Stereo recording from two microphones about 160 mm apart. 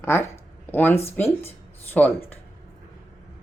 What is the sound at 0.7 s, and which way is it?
Speech, 15° left (ahead or behind).